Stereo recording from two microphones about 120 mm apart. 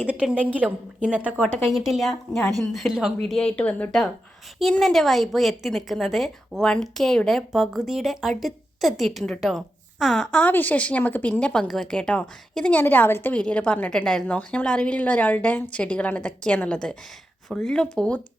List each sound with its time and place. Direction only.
0.0 s a woman's voice: 10° right (ahead or behind)
1.7 s a woman's voice: centre (ahead or behind)